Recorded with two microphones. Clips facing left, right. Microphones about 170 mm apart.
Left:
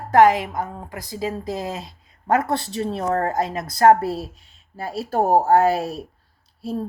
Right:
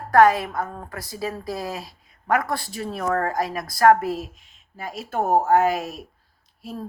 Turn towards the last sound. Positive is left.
turn(degrees=30)  # may be behind; listen again after turning